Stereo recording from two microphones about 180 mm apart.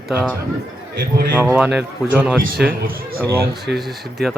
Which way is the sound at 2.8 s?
55° right (ahead or behind).